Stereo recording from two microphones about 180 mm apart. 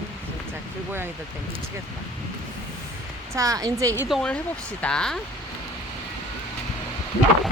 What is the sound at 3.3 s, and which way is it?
Speech, 20° right (ahead or behind).